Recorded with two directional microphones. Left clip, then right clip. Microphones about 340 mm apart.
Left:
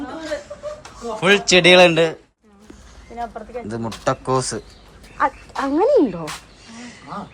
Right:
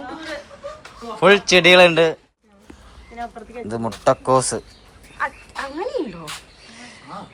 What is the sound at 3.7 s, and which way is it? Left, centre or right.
Speech, centre.